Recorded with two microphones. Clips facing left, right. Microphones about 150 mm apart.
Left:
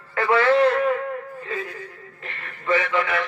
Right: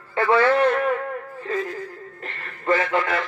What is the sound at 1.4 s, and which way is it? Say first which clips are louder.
Speech: right 4 dB; 45° right (ahead or behind).